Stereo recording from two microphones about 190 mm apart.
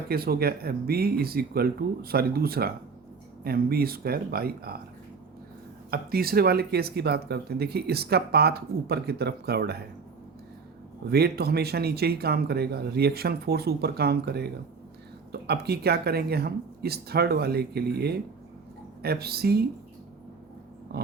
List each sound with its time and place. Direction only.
0.1 s speech: 55° right (ahead or behind)
5.9 s speech: 55° right (ahead or behind)
11.1 s speech: 55° right (ahead or behind)
20.9 s speech: 55° right (ahead or behind)